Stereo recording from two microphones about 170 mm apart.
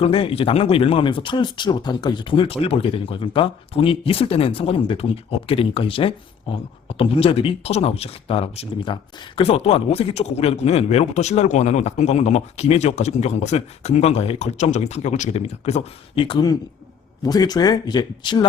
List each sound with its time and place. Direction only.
0.0 s speech: 35° left (ahead or behind)